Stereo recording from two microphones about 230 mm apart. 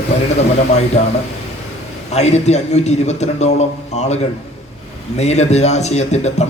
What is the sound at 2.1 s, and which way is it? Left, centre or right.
A man's voice, left.